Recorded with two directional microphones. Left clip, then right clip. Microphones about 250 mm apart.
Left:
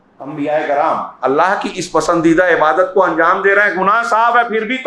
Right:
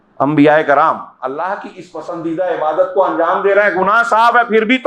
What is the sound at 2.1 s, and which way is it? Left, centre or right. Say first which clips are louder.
Speech: left 9 dB; left.